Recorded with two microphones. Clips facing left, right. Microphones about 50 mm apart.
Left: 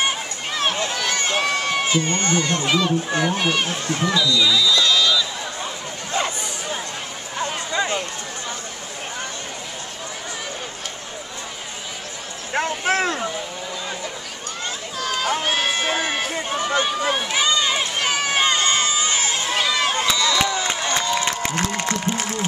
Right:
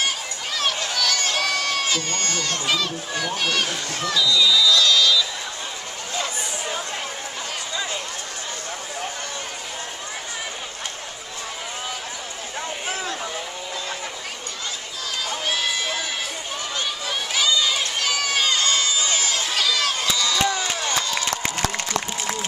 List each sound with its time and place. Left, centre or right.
0.6 s run: left
3.9 s speech: centre
7.7 s run: left
12.5 s a sound: left
15.0 s run: left
20.5 s crowd: left